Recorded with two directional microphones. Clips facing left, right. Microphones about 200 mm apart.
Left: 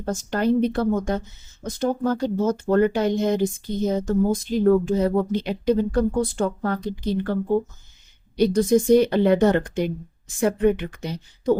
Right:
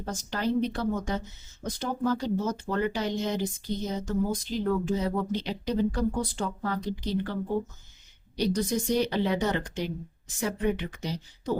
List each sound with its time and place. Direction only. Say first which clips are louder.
0.0 s speech: left 7 dB; 50° left (ahead or behind)
8.4 s speech: left 9 dB; 50° left (ahead or behind)